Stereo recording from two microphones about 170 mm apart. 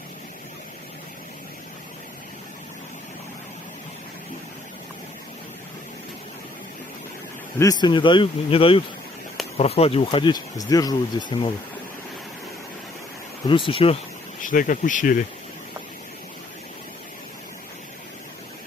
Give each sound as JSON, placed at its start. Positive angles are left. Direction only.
{"t": 7.5, "sound": "speech", "side_deg": 20}
{"t": 13.7, "sound": "speech", "side_deg": 35}
{"t": 14.4, "sound": "speech", "side_deg": 50}